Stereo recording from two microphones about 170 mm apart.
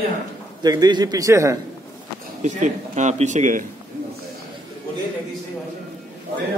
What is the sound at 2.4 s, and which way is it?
Speech, 45° right (ahead or behind).